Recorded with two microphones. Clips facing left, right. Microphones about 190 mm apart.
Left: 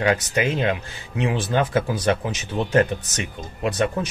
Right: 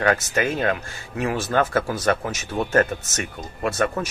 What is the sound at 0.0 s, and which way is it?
Speech, 15° left (ahead or behind).